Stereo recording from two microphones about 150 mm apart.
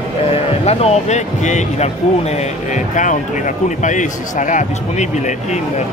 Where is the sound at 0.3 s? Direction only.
45° left (ahead or behind).